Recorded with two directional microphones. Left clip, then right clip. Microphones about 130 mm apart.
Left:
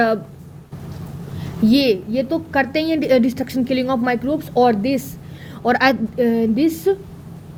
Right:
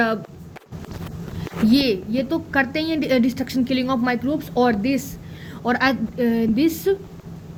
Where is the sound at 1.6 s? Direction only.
50° left (ahead or behind).